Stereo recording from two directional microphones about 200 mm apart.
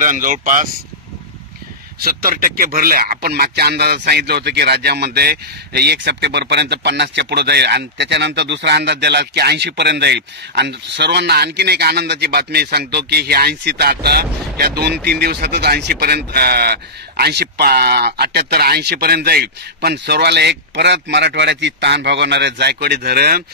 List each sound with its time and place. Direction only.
0.0 s speech: 40° right (ahead or behind)
2.0 s a man's voice: 45° right (ahead or behind)